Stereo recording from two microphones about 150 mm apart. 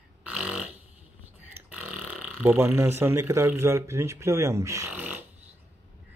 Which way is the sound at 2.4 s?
15° right (ahead or behind).